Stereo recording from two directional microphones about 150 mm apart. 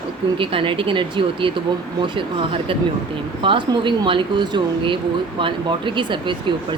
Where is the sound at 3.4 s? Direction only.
35° right (ahead or behind).